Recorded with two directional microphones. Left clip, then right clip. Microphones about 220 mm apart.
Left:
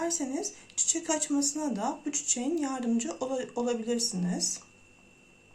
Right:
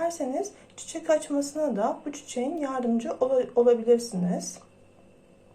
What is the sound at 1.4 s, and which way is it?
Speech, 10° left (ahead or behind).